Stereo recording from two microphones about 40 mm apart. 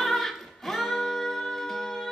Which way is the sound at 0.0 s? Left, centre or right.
Centre.